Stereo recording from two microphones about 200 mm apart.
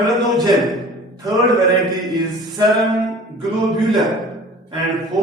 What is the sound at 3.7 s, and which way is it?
Mantra, centre (ahead or behind).